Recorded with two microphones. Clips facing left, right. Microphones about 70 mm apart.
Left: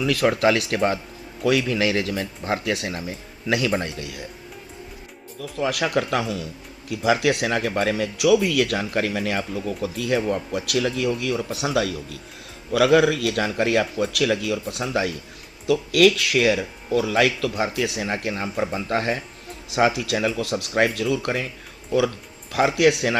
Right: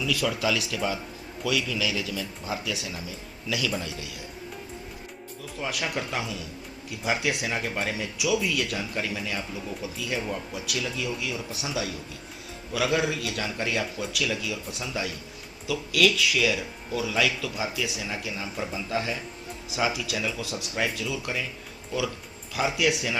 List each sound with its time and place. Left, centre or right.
0.0 s speech: left
5.4 s speech: left
6.9 s speech: left
22.5 s speech: left